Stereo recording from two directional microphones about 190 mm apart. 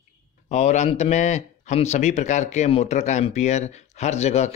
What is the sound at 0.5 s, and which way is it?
Speech, 35° left (ahead or behind).